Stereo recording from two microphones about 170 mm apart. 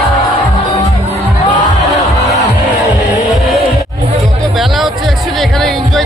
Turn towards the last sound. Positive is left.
turn(degrees=0)  # may be behind; listen again after turning